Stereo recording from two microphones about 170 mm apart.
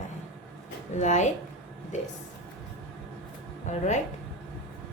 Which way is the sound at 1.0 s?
45° left (ahead or behind).